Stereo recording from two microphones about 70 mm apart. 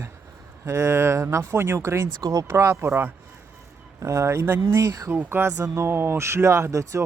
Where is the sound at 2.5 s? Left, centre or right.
Right.